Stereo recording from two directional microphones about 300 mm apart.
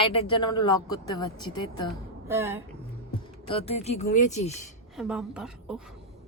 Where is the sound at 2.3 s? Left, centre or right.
Centre.